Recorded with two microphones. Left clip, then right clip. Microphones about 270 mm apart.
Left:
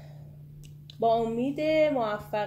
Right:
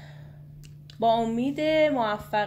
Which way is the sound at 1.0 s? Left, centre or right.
Right.